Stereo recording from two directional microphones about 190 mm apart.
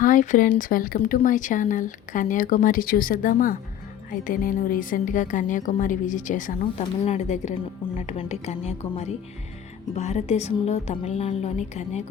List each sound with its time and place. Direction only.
0.0 s speech: 40° left (ahead or behind)
6.6 s music: 35° left (ahead or behind)